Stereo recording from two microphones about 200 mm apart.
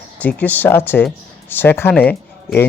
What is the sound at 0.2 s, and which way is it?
Speech, 10° left (ahead or behind).